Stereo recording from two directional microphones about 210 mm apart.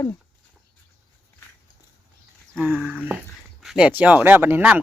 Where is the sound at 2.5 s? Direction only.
5° right (ahead or behind).